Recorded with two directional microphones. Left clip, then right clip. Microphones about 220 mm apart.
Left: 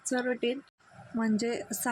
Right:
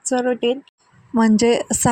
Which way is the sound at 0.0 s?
20° right (ahead or behind).